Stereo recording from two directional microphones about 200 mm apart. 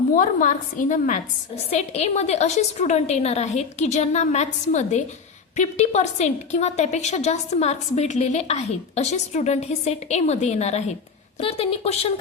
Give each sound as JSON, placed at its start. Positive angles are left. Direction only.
{"t": 0.1, "sound": "a woman's voice", "side_deg": 40}